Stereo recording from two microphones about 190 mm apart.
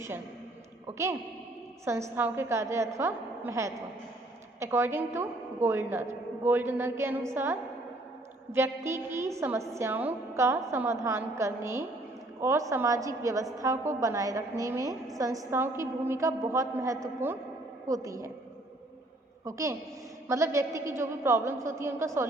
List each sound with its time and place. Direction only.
0.9 s a woman's voice: 15° right (ahead or behind)
19.5 s a woman's voice: 15° right (ahead or behind)